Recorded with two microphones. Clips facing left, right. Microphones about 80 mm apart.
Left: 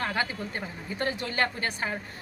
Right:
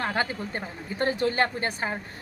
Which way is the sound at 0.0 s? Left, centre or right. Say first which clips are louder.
Right 2 dB; right.